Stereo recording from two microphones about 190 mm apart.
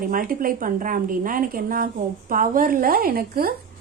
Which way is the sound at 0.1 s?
45° right (ahead or behind).